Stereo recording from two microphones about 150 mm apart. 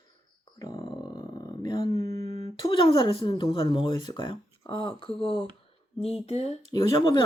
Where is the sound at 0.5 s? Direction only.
25° left (ahead or behind).